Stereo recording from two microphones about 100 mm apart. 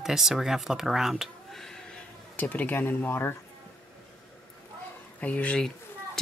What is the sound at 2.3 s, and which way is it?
Speech, 15° left (ahead or behind).